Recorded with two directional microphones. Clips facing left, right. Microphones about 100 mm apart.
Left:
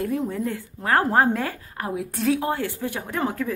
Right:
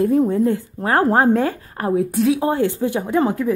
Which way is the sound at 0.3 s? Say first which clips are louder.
Right 10 dB; 25° right (ahead or behind).